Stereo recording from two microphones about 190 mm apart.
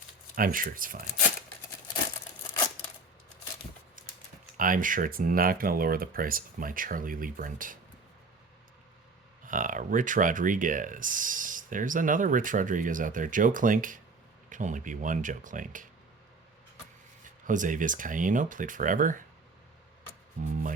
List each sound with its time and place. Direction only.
0.3 s speech: 50° right (ahead or behind)
4.0 s typing: 45° right (ahead or behind)
4.5 s speech: 45° right (ahead or behind)
9.5 s speech: 45° right (ahead or behind)
17.2 s speech: 45° right (ahead or behind)
20.4 s speech: 40° right (ahead or behind)